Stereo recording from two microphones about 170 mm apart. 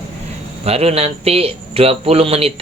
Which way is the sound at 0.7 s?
35° right (ahead or behind).